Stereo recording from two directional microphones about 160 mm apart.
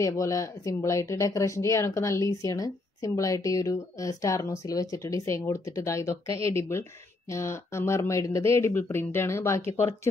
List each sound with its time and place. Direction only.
0.0 s speech: 20° left (ahead or behind)